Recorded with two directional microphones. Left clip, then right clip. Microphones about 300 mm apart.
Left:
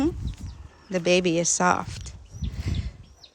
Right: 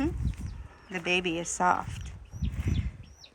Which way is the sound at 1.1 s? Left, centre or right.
Left.